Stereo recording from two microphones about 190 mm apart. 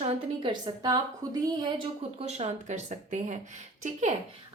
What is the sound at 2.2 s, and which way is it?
A woman's voice, 35° right (ahead or behind).